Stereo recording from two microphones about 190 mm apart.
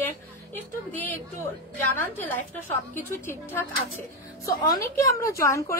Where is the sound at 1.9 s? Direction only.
10° left (ahead or behind).